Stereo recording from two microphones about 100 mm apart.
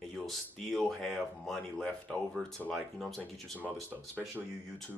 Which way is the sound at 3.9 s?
20° right (ahead or behind).